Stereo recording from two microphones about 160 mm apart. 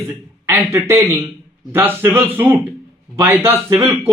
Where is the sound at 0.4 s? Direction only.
15° right (ahead or behind).